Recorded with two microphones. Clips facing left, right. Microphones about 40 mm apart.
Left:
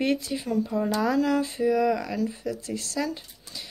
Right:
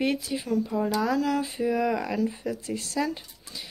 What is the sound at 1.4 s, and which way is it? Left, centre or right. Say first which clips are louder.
Speech: left 3 dB; centre.